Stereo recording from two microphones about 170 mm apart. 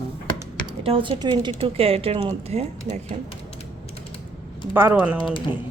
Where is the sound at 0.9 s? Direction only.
30° right (ahead or behind).